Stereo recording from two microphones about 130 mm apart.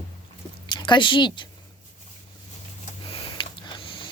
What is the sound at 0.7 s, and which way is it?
Speech, 35° left (ahead or behind).